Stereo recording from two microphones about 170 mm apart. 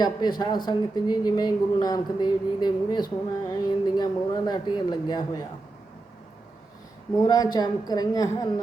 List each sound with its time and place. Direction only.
0.0 s speech: 25° left (ahead or behind)
7.2 s speech: 20° left (ahead or behind)